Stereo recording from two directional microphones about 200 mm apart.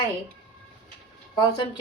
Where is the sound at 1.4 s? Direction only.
25° left (ahead or behind).